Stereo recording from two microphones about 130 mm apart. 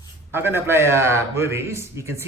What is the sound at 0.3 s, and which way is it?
A man's voice, 15° right (ahead or behind).